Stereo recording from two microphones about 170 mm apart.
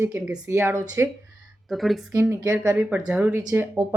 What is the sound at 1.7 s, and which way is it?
Speech, centre (ahead or behind).